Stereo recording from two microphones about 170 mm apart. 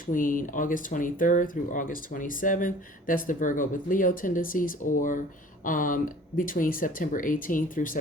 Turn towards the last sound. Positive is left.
turn(degrees=50)  # may be behind; listen again after turning